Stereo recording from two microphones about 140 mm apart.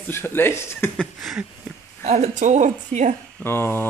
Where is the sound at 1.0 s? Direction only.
Centre (ahead or behind).